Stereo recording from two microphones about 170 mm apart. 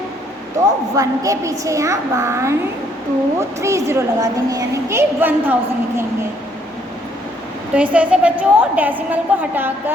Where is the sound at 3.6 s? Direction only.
15° right (ahead or behind).